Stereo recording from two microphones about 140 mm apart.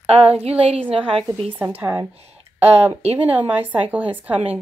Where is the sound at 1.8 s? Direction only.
15° right (ahead or behind).